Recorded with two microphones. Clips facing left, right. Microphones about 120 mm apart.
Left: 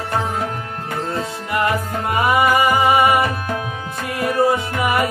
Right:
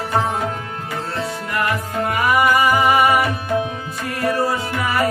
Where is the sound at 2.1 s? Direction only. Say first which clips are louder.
Left 1 dB; 25° left (ahead or behind).